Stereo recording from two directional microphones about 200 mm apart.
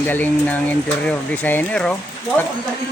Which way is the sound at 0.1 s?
10° left (ahead or behind).